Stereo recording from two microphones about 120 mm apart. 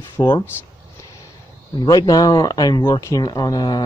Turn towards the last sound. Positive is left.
turn(degrees=35)  # may be behind; listen again after turning